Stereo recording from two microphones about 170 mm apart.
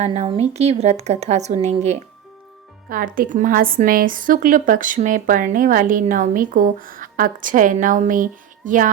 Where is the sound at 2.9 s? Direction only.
55° right (ahead or behind).